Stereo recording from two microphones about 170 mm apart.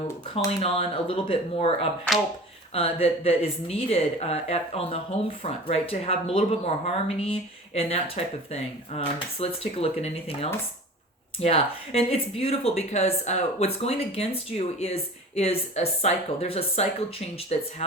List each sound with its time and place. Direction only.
0.3 s speech: 35° left (ahead or behind)